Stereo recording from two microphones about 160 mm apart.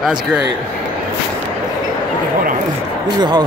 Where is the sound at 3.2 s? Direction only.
25° right (ahead or behind).